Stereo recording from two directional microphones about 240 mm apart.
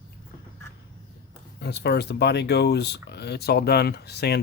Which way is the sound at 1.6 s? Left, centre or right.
Left.